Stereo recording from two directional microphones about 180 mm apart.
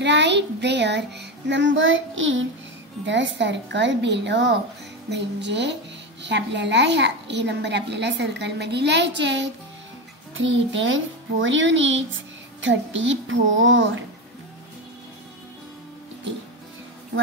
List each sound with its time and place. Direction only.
0.0 s a woman's voice: 75° right (ahead or behind)
10.3 s a child's voice: 90° right